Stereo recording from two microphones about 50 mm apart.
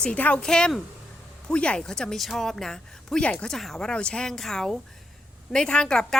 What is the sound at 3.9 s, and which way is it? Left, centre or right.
A woman's voice, centre.